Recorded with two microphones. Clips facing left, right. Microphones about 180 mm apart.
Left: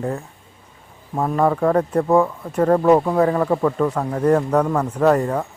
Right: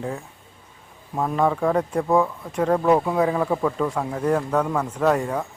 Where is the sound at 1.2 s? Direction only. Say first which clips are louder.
Left 3 dB; centre (ahead or behind).